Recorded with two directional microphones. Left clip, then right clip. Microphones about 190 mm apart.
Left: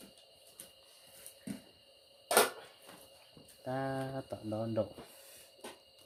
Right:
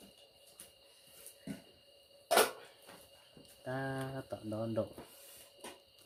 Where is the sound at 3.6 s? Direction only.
10° left (ahead or behind).